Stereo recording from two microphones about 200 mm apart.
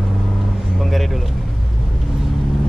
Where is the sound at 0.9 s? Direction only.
Centre (ahead or behind).